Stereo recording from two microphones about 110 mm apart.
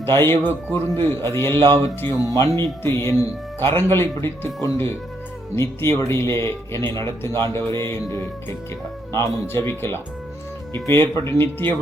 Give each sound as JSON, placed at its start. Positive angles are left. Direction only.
{"t": 0.0, "sound": "a man's voice", "side_deg": 25}